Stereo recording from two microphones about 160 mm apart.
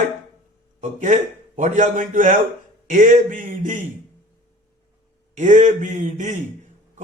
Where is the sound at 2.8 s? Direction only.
55° right (ahead or behind).